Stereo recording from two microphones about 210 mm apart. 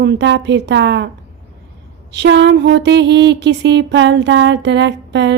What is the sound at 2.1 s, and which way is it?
Music, 55° right (ahead or behind).